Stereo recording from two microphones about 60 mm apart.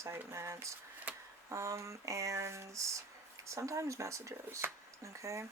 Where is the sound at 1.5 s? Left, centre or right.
Right.